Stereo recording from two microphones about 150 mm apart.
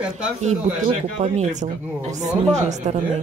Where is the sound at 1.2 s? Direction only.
50° right (ahead or behind).